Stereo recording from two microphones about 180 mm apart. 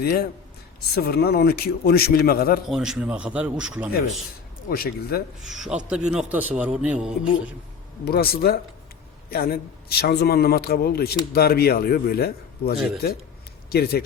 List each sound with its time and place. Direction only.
0.0 s a man's voice: 60° left (ahead or behind)
2.6 s a man's voice: 5° right (ahead or behind)
4.7 s a man's voice: 55° left (ahead or behind)
5.5 s a man's voice: 5° right (ahead or behind)
8.0 s a man's voice: 60° left (ahead or behind)